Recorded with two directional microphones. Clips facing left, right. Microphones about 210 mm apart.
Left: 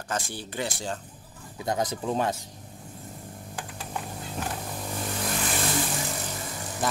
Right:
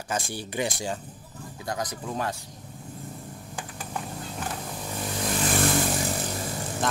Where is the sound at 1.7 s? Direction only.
25° left (ahead or behind).